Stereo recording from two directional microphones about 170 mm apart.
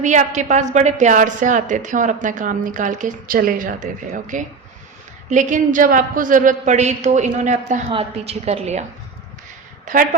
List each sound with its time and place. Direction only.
0.0 s a woman's voice: 45° right (ahead or behind)
9.8 s a woman's voice: 55° right (ahead or behind)